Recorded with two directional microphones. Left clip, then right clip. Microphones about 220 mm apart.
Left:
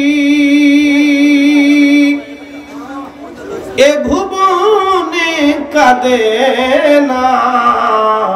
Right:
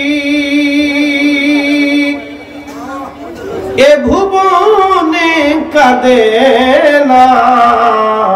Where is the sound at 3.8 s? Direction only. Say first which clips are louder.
Right 3 dB; 30° left (ahead or behind).